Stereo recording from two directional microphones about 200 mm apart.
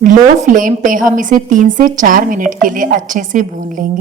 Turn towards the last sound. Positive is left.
turn(degrees=-40)  # may be behind; listen again after turning